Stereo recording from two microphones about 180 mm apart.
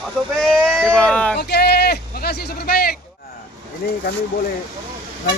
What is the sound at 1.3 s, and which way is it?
Speech, 65° left (ahead or behind).